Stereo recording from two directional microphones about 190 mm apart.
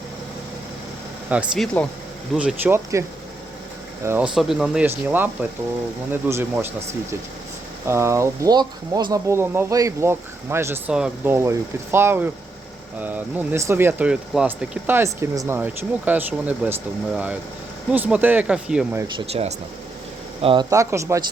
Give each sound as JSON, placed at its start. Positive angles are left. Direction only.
{"t": 1.3, "sound": "speech", "side_deg": -5}
{"t": 2.4, "sound": "speech", "side_deg": -10}
{"t": 4.0, "sound": "speech", "side_deg": -10}
{"t": 4.4, "sound": "speech", "side_deg": 0}
{"t": 17.9, "sound": "speech", "side_deg": -10}
{"t": 19.0, "sound": "speech", "side_deg": -30}
{"t": 20.7, "sound": "speech", "side_deg": -15}